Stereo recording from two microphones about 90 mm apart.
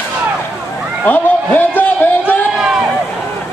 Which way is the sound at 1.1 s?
20° left (ahead or behind).